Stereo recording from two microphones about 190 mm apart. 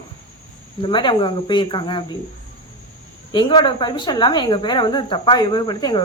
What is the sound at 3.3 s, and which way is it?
Speech, 25° left (ahead or behind).